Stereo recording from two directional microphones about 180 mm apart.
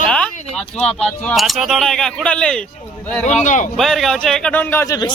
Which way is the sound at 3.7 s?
Centre (ahead or behind).